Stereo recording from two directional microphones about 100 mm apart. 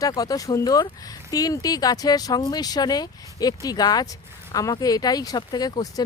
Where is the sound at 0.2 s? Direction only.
35° left (ahead or behind).